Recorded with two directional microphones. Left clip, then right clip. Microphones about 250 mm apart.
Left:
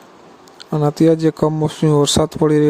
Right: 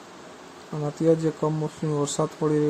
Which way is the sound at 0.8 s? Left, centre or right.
Left.